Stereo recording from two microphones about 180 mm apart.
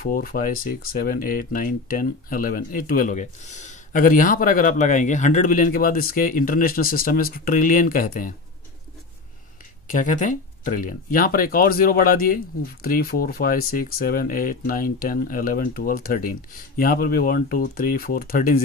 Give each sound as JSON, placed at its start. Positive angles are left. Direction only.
{"t": 0.0, "sound": "speech", "side_deg": 55}
{"t": 10.6, "sound": "speech", "side_deg": 50}